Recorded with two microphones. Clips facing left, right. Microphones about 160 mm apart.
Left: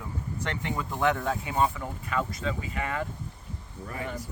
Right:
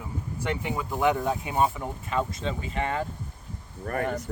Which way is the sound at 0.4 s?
10° right (ahead or behind).